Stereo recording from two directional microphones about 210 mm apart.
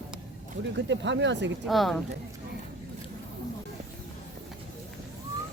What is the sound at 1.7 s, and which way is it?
Speech, centre (ahead or behind).